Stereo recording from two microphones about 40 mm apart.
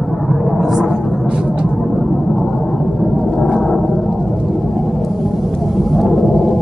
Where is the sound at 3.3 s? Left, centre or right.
Centre.